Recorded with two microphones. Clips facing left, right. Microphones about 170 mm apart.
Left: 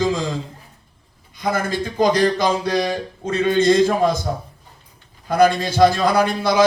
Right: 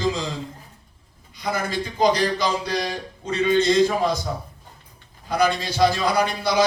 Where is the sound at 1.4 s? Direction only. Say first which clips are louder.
Left 4 dB; 50° left (ahead or behind).